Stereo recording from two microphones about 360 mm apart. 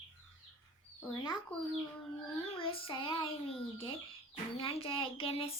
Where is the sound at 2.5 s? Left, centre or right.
Centre.